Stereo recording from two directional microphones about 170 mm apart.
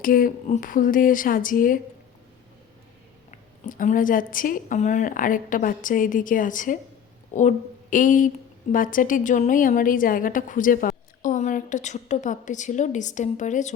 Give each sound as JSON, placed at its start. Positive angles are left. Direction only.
{"t": 0.0, "sound": "a woman's voice", "side_deg": 55}
{"t": 3.3, "sound": "a woman's voice", "side_deg": 50}